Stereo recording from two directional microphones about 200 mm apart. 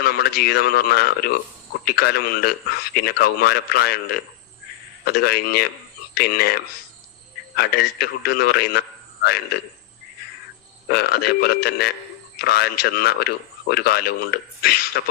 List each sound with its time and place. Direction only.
0.0 s speech: 50° left (ahead or behind)
10.8 s speech: 50° left (ahead or behind)